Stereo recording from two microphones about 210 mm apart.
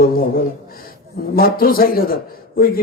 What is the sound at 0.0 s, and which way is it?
A man's voice, 45° left (ahead or behind).